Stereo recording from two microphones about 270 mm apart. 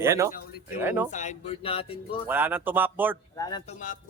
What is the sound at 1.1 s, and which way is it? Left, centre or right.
Music, left.